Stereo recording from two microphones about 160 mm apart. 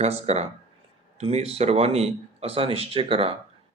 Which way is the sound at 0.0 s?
40° right (ahead or behind).